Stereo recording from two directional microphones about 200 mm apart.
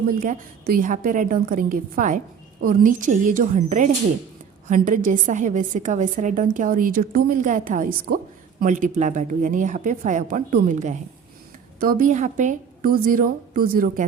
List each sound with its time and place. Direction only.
0.2 s a woman's voice: 45° right (ahead or behind)